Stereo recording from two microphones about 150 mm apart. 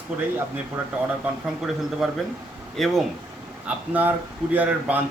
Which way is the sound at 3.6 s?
10° right (ahead or behind).